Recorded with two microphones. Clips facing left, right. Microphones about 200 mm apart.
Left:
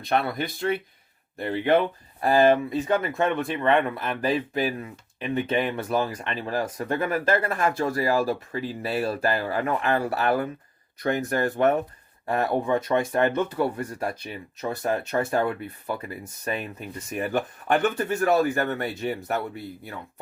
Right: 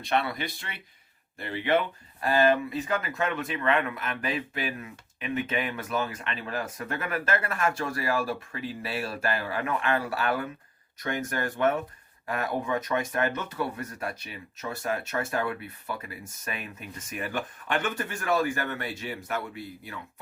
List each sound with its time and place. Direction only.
0.1 s speech: 50° left (ahead or behind)
2.2 s speech: 35° left (ahead or behind)